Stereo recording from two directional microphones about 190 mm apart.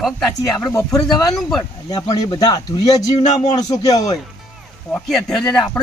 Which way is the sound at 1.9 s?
20° left (ahead or behind).